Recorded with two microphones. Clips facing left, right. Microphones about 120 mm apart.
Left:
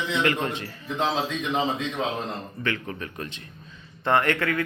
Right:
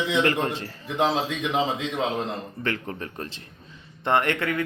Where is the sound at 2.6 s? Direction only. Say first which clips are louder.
Even; 35° right (ahead or behind).